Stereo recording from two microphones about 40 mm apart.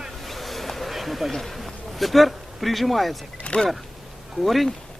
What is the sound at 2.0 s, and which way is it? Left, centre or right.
Speech, centre.